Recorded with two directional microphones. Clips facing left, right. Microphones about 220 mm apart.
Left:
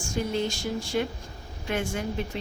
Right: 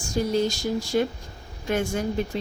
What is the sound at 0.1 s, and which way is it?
A woman's voice, 40° right (ahead or behind).